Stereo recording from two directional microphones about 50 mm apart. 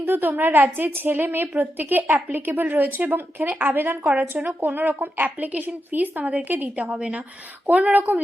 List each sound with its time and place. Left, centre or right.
0.0 s a woman's voice: right